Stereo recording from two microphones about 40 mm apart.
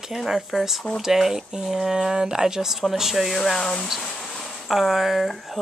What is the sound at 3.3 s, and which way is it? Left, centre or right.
Speech, centre.